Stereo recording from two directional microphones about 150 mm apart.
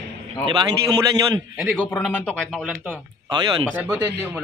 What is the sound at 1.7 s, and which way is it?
Speech, 10° left (ahead or behind).